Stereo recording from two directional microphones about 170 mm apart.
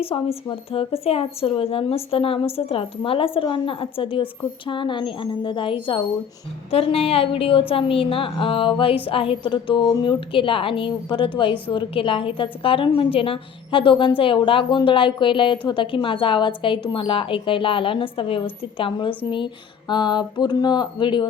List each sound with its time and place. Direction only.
0.0 s a woman's voice: 35° left (ahead or behind)